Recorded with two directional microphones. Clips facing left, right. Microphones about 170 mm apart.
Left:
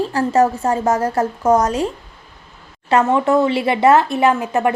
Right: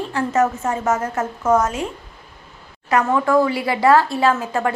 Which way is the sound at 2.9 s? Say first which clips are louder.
Left 2 dB; 25° left (ahead or behind).